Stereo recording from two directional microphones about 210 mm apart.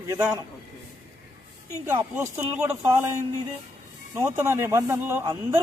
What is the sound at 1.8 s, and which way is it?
Speech, 10° right (ahead or behind).